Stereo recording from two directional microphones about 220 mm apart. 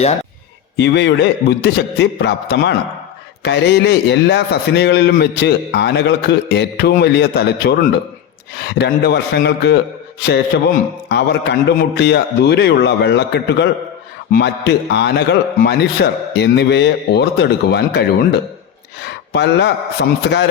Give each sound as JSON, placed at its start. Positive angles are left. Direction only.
{"t": 0.8, "sound": "a man's voice", "side_deg": 50}